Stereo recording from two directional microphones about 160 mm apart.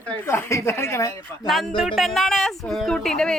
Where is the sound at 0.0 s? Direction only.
10° left (ahead or behind).